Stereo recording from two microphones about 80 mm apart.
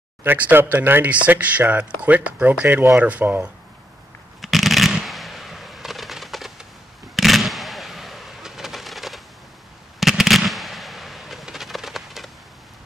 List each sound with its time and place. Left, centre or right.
0.2 s speech: right
4.4 s a sound: centre
9.9 s fireworks: centre